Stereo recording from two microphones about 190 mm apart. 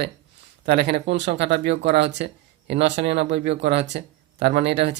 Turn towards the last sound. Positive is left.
turn(degrees=-65)  # may be behind; listen again after turning